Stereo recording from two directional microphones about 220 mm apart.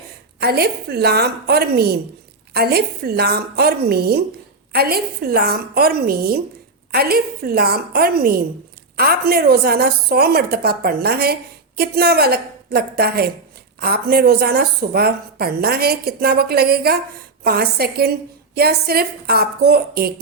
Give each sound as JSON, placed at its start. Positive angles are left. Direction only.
{"t": 0.3, "sound": "a woman's voice", "side_deg": -45}